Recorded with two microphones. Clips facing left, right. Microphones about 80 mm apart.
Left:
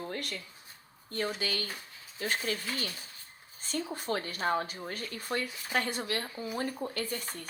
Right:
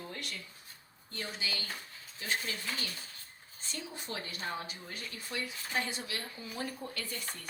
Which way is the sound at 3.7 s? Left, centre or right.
Left.